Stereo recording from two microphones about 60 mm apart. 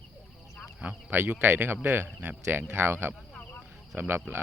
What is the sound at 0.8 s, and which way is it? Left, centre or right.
Speech, right.